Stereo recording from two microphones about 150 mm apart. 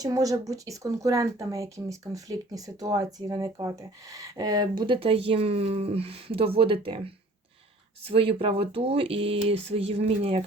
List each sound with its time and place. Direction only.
0.0 s speech: 25° right (ahead or behind); by 10.4 s 40° right (ahead or behind)